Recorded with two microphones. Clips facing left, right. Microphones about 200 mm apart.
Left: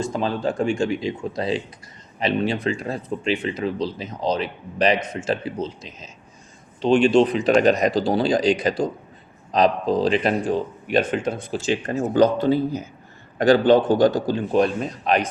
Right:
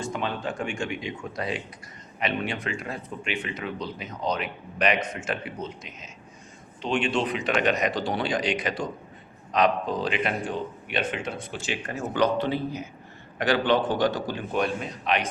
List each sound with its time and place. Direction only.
0.0 s a man's voice: 35° left (ahead or behind)